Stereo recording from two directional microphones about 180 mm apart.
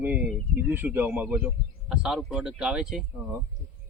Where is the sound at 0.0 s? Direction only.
10° right (ahead or behind).